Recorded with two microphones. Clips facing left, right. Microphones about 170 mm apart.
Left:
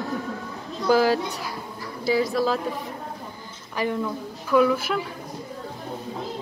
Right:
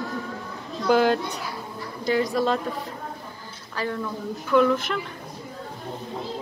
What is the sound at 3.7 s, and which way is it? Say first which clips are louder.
A woman's voice: left 3 dB; 15° left (ahead or behind).